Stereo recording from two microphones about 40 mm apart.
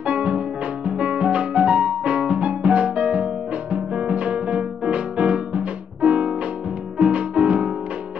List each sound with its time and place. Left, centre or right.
0.0 s music: right